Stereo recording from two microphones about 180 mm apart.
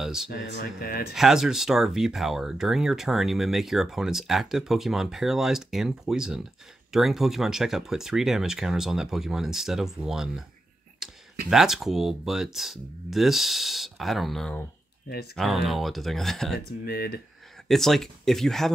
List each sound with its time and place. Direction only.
0.0 s speech: centre (ahead or behind)
0.3 s speech: 55° left (ahead or behind)
1.1 s speech: centre (ahead or behind)
16.5 s speech: 60° left (ahead or behind)
17.6 s speech: centre (ahead or behind)